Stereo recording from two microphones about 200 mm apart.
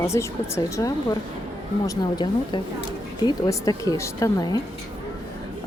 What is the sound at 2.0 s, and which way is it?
Speech, 20° left (ahead or behind).